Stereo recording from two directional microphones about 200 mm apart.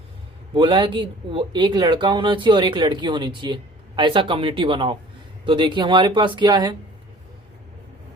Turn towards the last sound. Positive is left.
turn(degrees=-20)  # may be behind; listen again after turning